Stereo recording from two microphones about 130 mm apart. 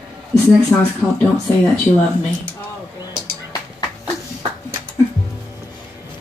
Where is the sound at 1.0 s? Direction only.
5° right (ahead or behind).